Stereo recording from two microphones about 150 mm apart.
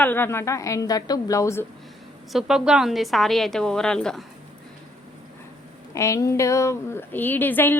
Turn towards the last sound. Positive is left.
turn(degrees=15)  # may be behind; listen again after turning